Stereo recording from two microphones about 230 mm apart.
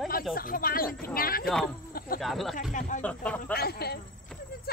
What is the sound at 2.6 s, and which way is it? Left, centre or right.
Speech, left.